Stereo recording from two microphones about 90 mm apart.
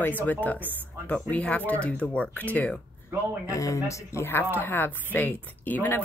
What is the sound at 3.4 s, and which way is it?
Speech, 35° left (ahead or behind).